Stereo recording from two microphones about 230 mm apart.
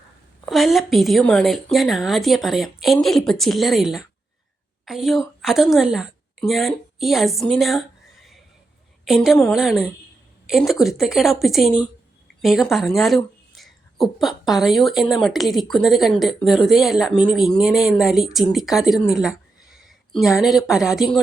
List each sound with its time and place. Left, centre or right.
0.4 s a woman's voice: centre
9.0 s a woman's voice: centre